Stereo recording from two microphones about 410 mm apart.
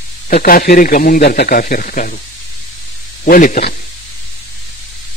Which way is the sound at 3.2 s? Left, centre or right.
Centre.